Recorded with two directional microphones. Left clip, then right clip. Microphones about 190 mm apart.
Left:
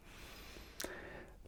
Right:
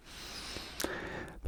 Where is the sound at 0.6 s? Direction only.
35° right (ahead or behind).